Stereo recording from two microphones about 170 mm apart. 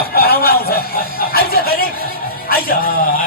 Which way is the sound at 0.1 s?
65° left (ahead or behind).